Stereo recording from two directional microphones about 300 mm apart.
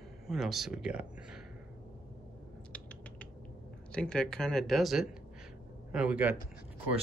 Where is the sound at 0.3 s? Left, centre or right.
Centre.